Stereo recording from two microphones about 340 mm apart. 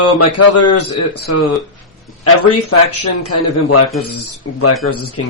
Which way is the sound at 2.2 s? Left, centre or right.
Left.